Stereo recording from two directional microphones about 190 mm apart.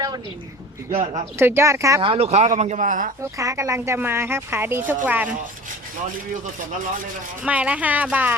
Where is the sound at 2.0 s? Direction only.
30° right (ahead or behind).